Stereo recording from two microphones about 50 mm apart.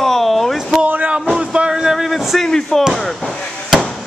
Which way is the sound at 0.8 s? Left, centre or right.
Right.